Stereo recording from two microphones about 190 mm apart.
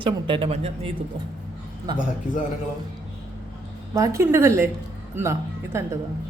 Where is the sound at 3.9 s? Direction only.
15° right (ahead or behind).